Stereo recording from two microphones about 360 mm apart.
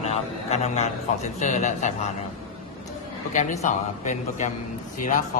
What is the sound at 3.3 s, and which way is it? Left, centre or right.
A man's voice, centre.